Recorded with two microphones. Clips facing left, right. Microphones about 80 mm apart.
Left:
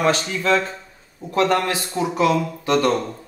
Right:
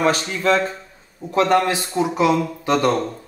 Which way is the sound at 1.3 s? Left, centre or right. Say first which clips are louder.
Right 2 dB; centre.